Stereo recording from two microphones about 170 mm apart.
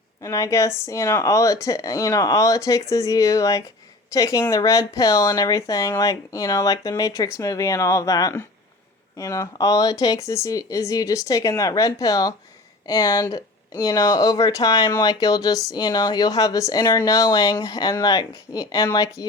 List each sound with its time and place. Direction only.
0.2 s speech: 20° left (ahead or behind)